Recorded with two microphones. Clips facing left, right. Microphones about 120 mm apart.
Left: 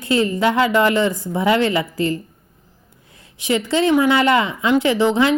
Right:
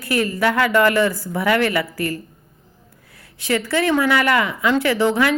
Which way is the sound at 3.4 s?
20° left (ahead or behind).